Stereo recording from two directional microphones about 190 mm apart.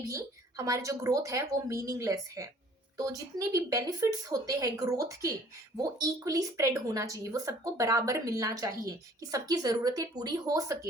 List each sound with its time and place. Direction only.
0.1 s speech: 15° right (ahead or behind)